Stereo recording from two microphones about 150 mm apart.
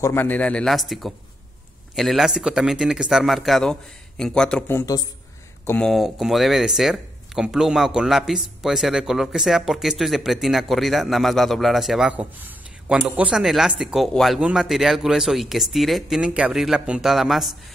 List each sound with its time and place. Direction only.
0.0 s a man's voice: 15° left (ahead or behind)
4.7 s speech: 25° left (ahead or behind)
5.9 s speech: 5° right (ahead or behind)